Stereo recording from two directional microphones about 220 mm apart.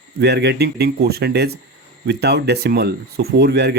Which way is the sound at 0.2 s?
50° right (ahead or behind).